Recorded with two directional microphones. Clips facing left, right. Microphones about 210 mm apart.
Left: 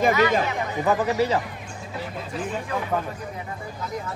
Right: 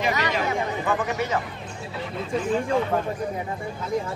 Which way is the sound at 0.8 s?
35° left (ahead or behind).